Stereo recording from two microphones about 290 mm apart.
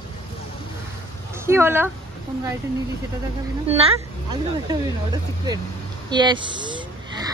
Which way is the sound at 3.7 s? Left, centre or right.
Centre.